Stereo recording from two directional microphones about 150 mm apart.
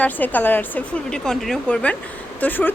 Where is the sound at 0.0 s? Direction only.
10° left (ahead or behind).